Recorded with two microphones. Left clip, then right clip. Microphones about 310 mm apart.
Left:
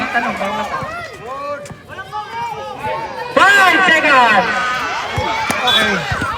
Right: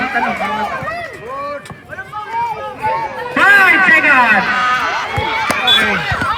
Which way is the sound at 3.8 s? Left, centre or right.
Left.